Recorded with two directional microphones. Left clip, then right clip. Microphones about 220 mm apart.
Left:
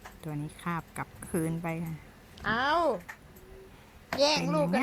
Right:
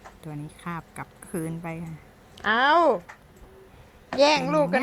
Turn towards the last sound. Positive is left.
turn(degrees=-15)  # may be behind; listen again after turning